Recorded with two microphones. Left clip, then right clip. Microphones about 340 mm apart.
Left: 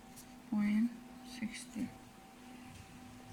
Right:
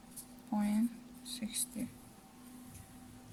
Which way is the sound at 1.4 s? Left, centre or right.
Right.